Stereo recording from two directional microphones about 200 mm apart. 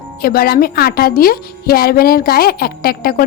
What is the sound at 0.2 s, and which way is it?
A woman's voice, 50° left (ahead or behind).